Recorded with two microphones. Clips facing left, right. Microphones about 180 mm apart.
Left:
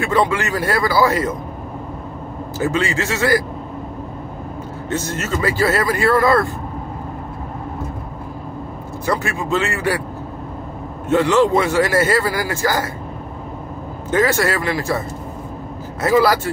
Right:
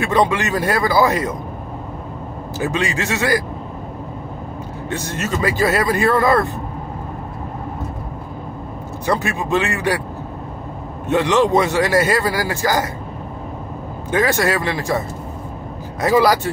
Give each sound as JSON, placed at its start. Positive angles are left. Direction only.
{"t": 0.0, "sound": "a man's voice", "side_deg": -20}
{"t": 2.6, "sound": "a man's voice", "side_deg": -15}
{"t": 4.8, "sound": "a man's voice", "side_deg": -15}
{"t": 9.0, "sound": "a man's voice", "side_deg": -15}
{"t": 11.1, "sound": "a man's voice", "side_deg": -15}
{"t": 14.1, "sound": "a man's voice", "side_deg": -15}